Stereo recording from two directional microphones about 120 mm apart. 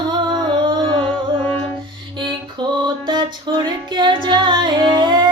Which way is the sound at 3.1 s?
35° right (ahead or behind).